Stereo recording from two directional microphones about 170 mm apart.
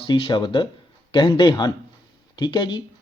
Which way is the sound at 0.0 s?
30° left (ahead or behind).